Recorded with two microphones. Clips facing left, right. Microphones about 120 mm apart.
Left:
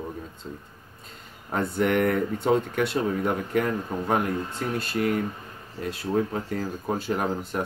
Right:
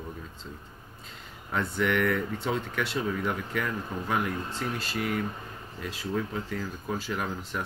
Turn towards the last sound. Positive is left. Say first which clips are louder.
# left 6 dB
turn(degrees=45)  # may be behind; listen again after turning